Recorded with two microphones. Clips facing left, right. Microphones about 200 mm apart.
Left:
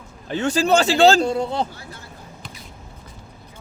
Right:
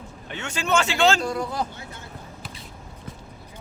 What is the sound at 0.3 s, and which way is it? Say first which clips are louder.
Speech: left 8 dB; 35° left (ahead or behind).